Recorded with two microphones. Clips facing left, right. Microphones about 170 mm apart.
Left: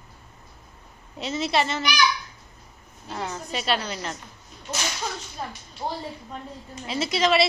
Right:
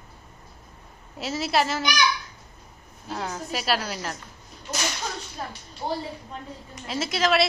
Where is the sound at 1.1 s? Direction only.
5° right (ahead or behind).